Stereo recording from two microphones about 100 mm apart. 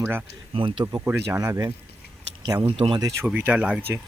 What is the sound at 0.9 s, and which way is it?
Speech, 30° right (ahead or behind).